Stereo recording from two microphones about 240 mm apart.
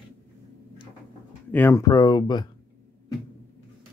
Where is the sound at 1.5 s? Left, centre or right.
Centre.